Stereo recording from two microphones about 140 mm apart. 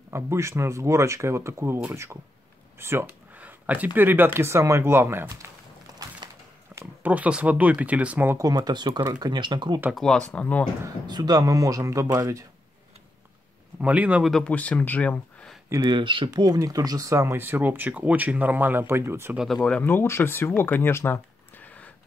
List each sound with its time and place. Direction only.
0.1 s speech: 20° right (ahead or behind)
6.7 s speech: 15° right (ahead or behind)
8.5 s speech: 30° right (ahead or behind)
9.9 s speech: 5° left (ahead or behind)
11.1 s speech: 30° right (ahead or behind)
13.7 s speech: 10° right (ahead or behind)
14.3 s speech: 10° left (ahead or behind)
15.7 s speech: 25° right (ahead or behind)
16.0 s speech: 35° right (ahead or behind); by 19.3 s 15° right (ahead or behind)
19.3 s speech: centre (ahead or behind)
19.8 s speech: 15° left (ahead or behind)